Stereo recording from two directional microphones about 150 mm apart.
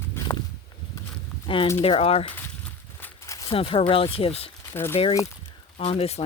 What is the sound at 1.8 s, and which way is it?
Speech, 40° left (ahead or behind).